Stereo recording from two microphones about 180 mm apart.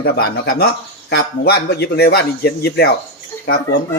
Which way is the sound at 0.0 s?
60° left (ahead or behind).